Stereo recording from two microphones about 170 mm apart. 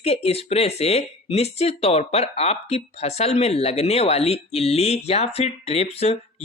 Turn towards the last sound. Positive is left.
turn(degrees=40)  # may be behind; listen again after turning